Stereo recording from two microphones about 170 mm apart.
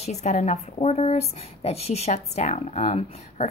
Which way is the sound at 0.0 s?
40° left (ahead or behind).